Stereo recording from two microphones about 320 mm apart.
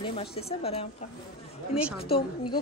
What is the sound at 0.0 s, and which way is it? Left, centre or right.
Speech, centre.